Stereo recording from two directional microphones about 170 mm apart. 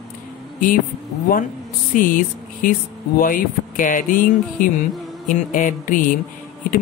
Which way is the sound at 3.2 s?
55° left (ahead or behind).